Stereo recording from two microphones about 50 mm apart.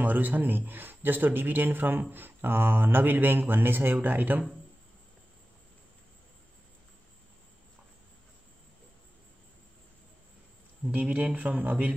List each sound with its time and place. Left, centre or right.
0.0 s a man's voice: right
10.9 s speech: right